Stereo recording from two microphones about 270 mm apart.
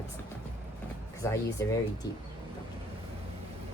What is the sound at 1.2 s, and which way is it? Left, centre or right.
Speech, centre.